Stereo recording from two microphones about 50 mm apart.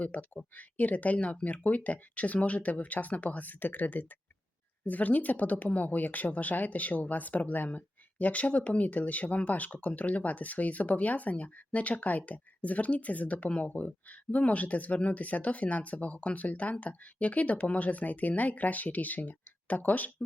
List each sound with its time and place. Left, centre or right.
0.0 s a woman's voice: left